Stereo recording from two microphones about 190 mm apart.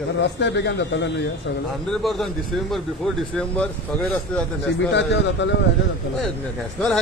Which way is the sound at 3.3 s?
5° left (ahead or behind).